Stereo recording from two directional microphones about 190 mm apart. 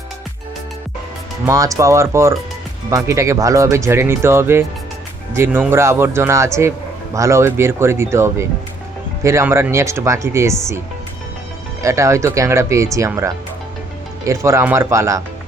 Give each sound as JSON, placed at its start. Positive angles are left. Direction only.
{"t": 1.5, "sound": "speech", "side_deg": -15}